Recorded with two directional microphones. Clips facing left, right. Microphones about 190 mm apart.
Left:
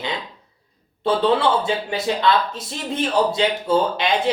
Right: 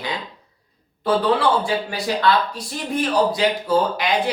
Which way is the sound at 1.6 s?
25° left (ahead or behind).